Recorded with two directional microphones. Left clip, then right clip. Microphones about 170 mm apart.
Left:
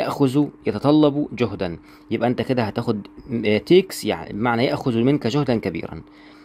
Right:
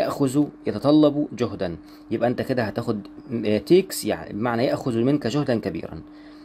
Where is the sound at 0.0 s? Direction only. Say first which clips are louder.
Left 2 dB; 25° left (ahead or behind).